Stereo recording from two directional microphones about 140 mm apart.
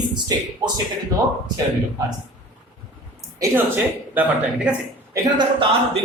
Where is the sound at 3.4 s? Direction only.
15° right (ahead or behind).